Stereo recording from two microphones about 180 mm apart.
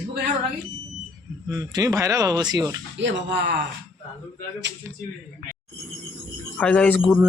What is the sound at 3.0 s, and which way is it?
Speech, 80° right.